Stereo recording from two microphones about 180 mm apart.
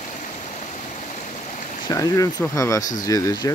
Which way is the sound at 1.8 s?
20° left (ahead or behind).